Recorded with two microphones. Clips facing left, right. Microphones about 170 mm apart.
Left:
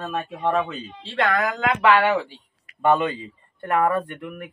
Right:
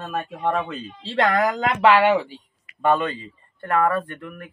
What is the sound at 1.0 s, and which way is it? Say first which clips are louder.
Speech: right 3 dB; 35° right (ahead or behind).